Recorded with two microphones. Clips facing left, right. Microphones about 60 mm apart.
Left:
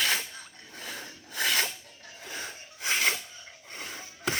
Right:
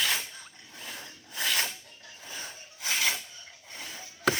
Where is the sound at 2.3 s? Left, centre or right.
Left.